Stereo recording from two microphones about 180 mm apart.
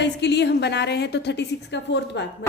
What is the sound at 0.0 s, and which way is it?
A woman's voice, 75° left (ahead or behind).